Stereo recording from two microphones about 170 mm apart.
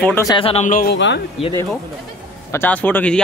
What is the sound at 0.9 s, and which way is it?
Speech, 90° left.